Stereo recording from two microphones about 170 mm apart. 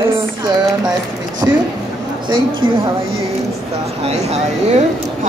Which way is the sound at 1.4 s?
15° right (ahead or behind).